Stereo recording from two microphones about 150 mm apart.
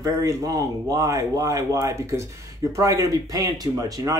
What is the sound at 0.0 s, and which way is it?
Speech, 20° right (ahead or behind).